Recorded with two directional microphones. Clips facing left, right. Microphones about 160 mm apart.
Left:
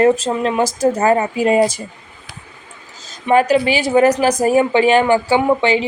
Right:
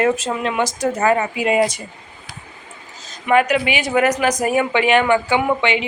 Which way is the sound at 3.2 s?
30° left (ahead or behind).